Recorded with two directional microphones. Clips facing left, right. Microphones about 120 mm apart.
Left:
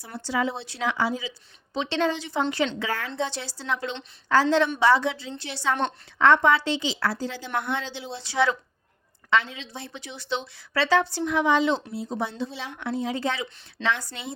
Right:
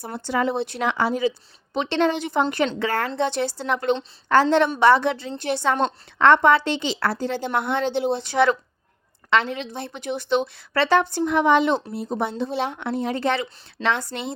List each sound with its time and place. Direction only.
0.3 s a woman's voice: 60° right (ahead or behind)